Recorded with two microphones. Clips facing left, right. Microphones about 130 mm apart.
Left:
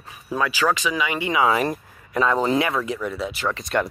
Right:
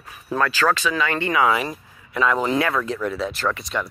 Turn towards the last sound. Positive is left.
turn(degrees=60)  # may be behind; listen again after turning